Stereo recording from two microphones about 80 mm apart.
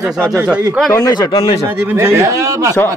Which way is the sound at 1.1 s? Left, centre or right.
Left.